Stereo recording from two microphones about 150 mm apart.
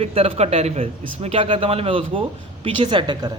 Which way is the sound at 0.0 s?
40° right (ahead or behind).